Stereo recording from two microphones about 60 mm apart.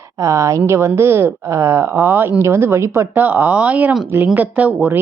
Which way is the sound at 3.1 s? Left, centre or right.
Right.